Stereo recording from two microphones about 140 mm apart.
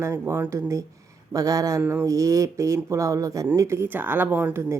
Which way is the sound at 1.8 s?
15° right (ahead or behind).